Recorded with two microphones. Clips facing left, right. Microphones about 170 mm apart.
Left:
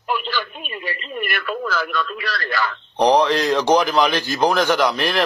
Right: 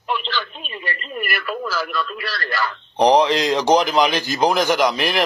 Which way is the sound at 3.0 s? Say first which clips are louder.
Right 1 dB; 15° right (ahead or behind).